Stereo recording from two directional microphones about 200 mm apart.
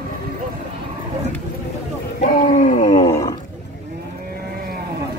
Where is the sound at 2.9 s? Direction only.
15° left (ahead or behind).